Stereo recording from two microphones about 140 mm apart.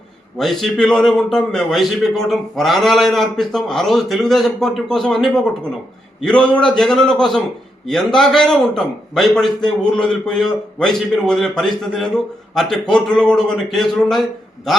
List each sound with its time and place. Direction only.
0.3 s a man's voice: centre (ahead or behind)